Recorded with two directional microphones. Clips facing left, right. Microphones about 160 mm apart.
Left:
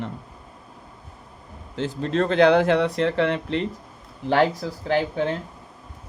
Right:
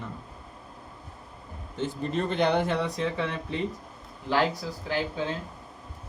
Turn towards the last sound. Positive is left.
turn(degrees=60)  # may be behind; listen again after turning